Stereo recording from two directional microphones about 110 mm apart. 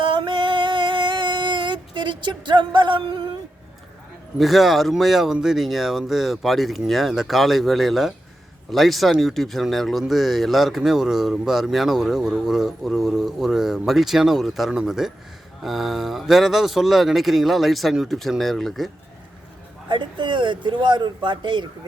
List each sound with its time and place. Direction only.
0.0 s music: 50° right (ahead or behind)
4.4 s speech: centre (ahead or behind)
19.9 s speech: 45° right (ahead or behind)